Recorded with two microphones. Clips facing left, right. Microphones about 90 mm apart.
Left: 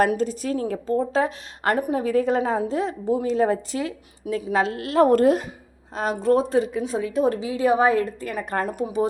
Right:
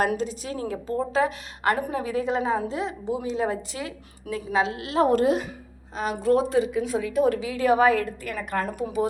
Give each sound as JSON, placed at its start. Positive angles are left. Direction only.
{"t": 0.2, "sound": "a woman's voice", "side_deg": 40}
{"t": 2.1, "sound": "a woman's voice", "side_deg": 45}
{"t": 4.5, "sound": "a woman's voice", "side_deg": 45}
{"t": 8.4, "sound": "a woman's voice", "side_deg": 40}